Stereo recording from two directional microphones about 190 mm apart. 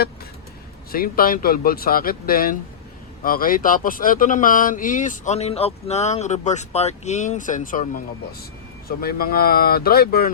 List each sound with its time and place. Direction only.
0.9 s speech: 50° left (ahead or behind)